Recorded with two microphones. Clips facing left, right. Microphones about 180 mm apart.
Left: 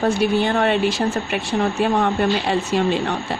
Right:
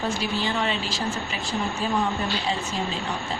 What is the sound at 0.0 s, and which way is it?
Speech, 60° left (ahead or behind).